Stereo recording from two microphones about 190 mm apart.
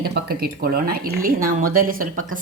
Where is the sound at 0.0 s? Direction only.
55° right (ahead or behind).